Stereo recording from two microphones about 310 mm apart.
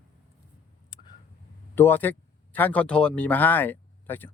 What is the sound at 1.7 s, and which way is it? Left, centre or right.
Speech, centre.